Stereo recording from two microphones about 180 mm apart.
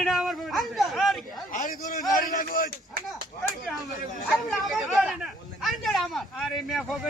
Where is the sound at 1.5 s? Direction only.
50° left (ahead or behind).